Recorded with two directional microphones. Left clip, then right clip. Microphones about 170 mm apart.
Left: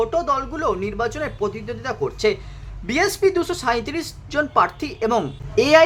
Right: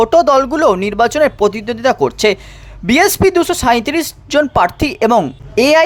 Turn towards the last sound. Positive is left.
turn(degrees=-45)  # may be behind; listen again after turning